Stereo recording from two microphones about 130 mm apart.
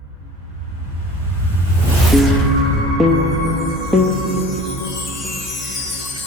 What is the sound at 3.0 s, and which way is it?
Music, centre (ahead or behind).